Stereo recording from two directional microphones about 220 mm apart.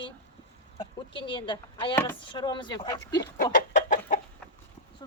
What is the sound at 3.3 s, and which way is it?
Chicken, 35° left (ahead or behind).